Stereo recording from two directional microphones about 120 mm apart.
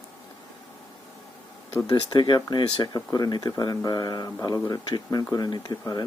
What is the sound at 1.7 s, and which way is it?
Speech, 35° left (ahead or behind).